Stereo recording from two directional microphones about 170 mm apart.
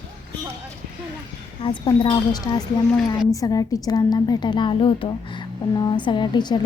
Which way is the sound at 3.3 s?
20° left (ahead or behind).